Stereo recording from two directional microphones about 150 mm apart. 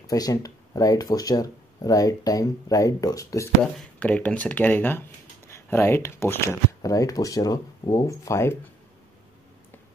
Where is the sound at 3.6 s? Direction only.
10° left (ahead or behind).